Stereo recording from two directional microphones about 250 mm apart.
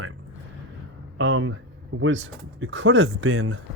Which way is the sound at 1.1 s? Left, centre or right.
Right.